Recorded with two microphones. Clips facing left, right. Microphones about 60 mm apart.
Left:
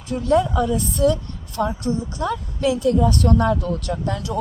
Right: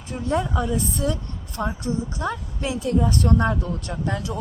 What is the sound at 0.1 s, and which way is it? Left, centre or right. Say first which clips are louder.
A woman's voice: left 6 dB; right.